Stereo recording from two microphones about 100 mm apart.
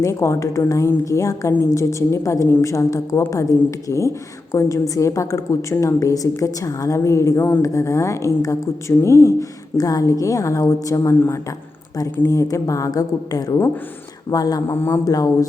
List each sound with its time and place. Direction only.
0.0 s a woman's voice: 30° left (ahead or behind)
14.8 s speech: 25° left (ahead or behind)
15.0 s a woman's voice: 35° left (ahead or behind)